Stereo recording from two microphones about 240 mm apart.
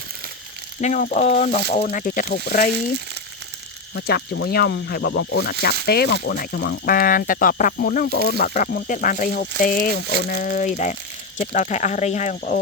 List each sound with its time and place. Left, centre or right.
0.8 s speech: left
3.9 s speech: left